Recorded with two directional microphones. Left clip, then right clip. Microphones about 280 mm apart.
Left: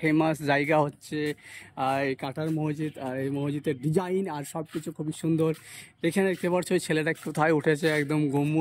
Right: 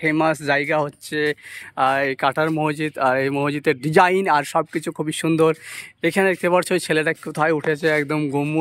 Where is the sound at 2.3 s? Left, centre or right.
Right.